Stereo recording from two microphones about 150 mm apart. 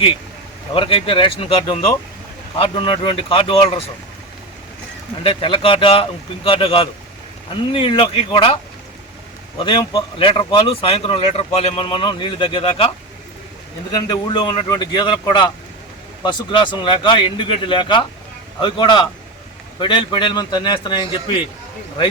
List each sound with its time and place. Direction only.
0.7 s speech: 35° left (ahead or behind)
5.2 s speech: 35° left (ahead or behind)
9.6 s speech: 35° left (ahead or behind)
13.9 s speech: 30° left (ahead or behind)